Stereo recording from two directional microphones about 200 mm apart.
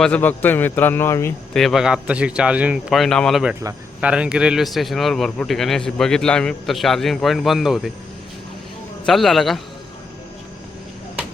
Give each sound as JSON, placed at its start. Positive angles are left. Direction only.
{"t": 0.0, "sound": "speech", "side_deg": 5}
{"t": 1.5, "sound": "a man's voice", "side_deg": 0}
{"t": 3.6, "sound": "speech", "side_deg": -15}
{"t": 4.1, "sound": "a man's voice", "side_deg": -5}
{"t": 9.0, "sound": "a man's voice", "side_deg": 0}